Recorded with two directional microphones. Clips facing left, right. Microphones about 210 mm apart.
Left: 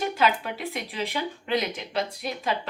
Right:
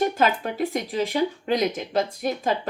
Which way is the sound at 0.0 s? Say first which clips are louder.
Right 3 dB; 45° right (ahead or behind).